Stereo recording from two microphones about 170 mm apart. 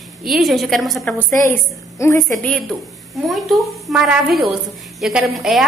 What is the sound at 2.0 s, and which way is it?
Speech, 15° left (ahead or behind).